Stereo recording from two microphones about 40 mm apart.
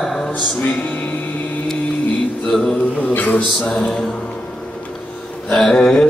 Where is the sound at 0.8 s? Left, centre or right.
Left.